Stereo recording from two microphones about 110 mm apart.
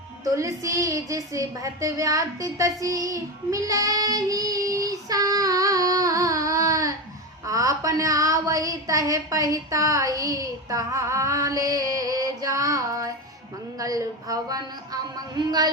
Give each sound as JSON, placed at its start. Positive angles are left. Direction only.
{"t": 0.3, "sound": "a woman's voice", "side_deg": -30}